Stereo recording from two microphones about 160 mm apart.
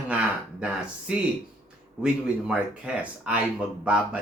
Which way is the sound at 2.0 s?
5° right (ahead or behind).